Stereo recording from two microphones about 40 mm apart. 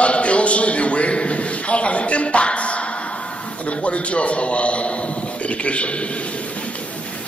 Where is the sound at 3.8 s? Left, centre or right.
Left.